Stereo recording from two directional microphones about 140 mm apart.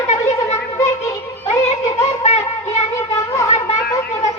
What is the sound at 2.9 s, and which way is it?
Cat, 20° left (ahead or behind).